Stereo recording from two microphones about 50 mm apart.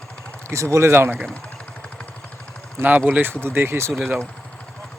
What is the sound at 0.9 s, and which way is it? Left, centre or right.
Speech, right.